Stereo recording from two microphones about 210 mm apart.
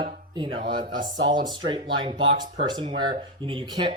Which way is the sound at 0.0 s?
20° right (ahead or behind).